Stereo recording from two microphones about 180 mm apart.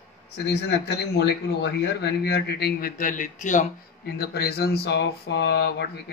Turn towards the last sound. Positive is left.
turn(degrees=65)  # may be behind; listen again after turning